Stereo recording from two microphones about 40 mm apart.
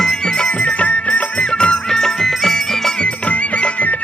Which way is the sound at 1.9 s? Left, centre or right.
Centre.